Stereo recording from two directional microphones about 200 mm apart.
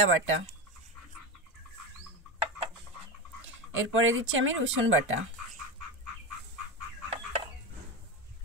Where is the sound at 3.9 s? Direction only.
75° right (ahead or behind).